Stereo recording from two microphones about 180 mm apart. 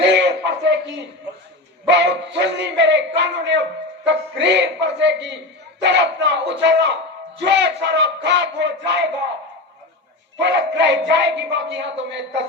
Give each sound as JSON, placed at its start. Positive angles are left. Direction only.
{"t": 0.0, "sound": "a sound", "side_deg": -75}
{"t": 1.9, "sound": "speech", "side_deg": -75}
{"t": 10.4, "sound": "speech", "side_deg": -75}